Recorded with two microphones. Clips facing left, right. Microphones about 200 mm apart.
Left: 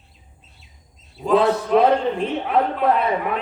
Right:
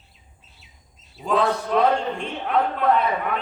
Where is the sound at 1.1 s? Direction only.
Centre (ahead or behind).